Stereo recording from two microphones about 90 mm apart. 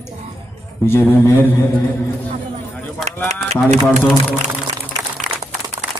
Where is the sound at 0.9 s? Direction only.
30° left (ahead or behind).